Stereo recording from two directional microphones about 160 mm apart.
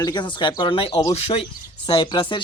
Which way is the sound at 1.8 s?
30° left (ahead or behind).